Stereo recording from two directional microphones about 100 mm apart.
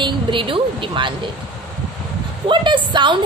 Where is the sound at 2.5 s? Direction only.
55° right (ahead or behind).